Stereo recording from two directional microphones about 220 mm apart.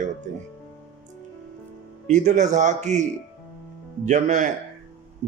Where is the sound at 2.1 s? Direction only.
35° right (ahead or behind).